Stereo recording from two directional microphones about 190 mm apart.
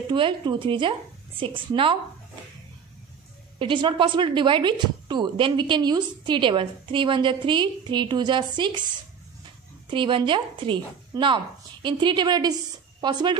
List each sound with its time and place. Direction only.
0.1 s a woman's voice: 25° right (ahead or behind)
3.5 s a woman's voice: 25° right (ahead or behind)